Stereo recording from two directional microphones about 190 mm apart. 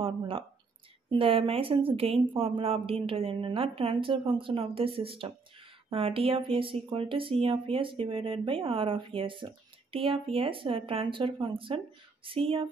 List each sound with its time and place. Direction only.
0.0 s speech: 30° right (ahead or behind)